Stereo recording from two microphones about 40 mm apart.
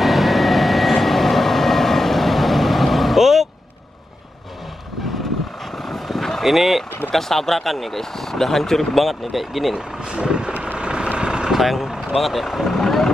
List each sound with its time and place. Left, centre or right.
0.0 s vehicle: centre
5.8 s vehicle: centre
6.4 s speech: centre
9.8 s speech: right
10.7 s vehicle: right
11.5 s speech: centre
11.9 s vehicle: centre
12.2 s speech: centre